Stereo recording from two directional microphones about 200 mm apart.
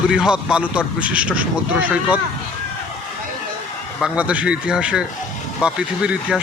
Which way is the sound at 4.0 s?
5° right (ahead or behind).